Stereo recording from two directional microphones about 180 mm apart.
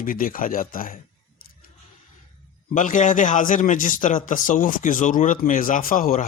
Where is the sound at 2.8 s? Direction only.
45° left (ahead or behind).